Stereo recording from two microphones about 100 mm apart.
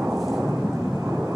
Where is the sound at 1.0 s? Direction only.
15° right (ahead or behind).